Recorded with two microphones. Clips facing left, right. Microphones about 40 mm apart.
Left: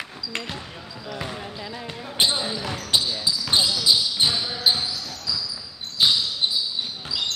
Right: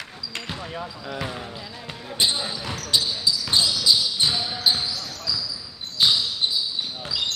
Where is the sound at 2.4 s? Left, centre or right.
Centre.